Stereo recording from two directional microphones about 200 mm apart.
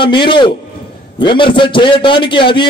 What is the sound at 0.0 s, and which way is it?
A man's voice, 25° left (ahead or behind).